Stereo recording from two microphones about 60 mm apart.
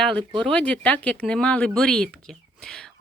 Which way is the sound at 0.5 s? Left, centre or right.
Centre.